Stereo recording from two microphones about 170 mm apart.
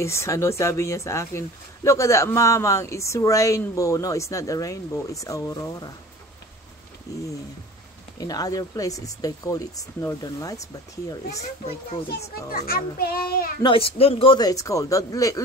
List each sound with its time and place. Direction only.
0.0 s speech: 15° left (ahead or behind)
7.1 s speech: 20° left (ahead or behind)
12.4 s a child's voice: 60° left (ahead or behind)
13.6 s speech: 30° left (ahead or behind)